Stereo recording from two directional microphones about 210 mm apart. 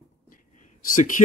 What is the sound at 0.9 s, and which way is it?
Speech, 40° left (ahead or behind).